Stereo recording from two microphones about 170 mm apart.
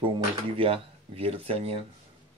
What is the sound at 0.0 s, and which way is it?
Speech, 30° right (ahead or behind).